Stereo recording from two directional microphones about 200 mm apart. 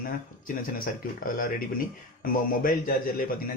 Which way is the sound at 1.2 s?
45° left (ahead or behind).